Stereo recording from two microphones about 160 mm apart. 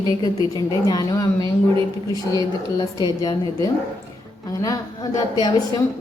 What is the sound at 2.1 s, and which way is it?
A woman's voice, 25° left (ahead or behind).